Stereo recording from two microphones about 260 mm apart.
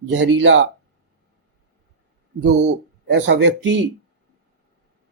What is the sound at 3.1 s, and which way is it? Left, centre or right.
Speech, right.